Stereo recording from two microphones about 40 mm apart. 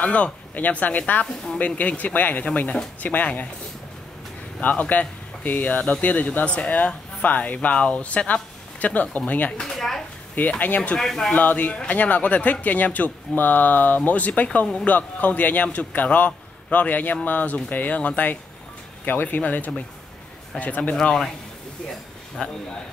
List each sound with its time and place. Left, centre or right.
0.0 s speech: left
4.6 s speech: left
9.8 s speech: centre
10.4 s speech: left
11.0 s speech: centre
11.3 s speech: left
20.9 s speech: centre
22.4 s a man's voice: left